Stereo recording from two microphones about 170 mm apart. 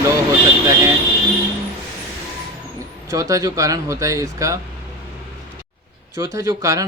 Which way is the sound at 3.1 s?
20° right (ahead or behind).